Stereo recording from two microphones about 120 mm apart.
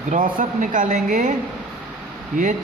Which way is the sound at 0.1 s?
90° right.